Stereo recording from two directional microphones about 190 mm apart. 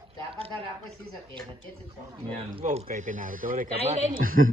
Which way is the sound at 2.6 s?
35° right (ahead or behind).